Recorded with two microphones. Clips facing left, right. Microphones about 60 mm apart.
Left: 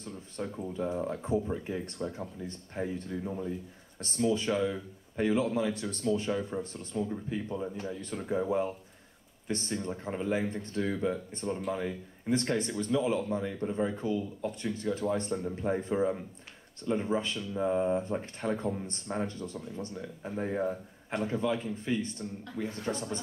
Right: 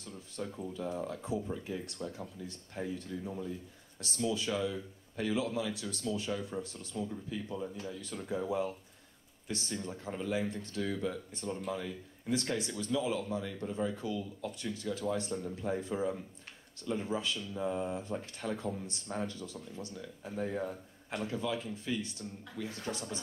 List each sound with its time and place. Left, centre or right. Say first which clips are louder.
0.4 s speech: left 4 dB; left
4.0 s speech: left 5 dB; left